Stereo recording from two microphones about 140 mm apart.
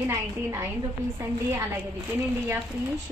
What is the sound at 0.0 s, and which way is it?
A woman's voice, 15° right (ahead or behind).